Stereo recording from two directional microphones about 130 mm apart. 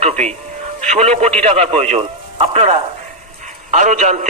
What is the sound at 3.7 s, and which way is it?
Speech, 70° right (ahead or behind).